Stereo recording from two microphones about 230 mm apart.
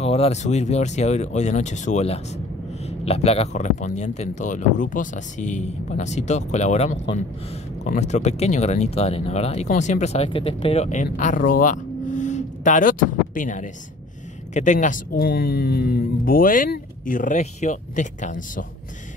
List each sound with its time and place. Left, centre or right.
0.0 s speech: left